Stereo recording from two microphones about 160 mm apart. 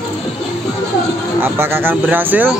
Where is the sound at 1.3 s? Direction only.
15° right (ahead or behind).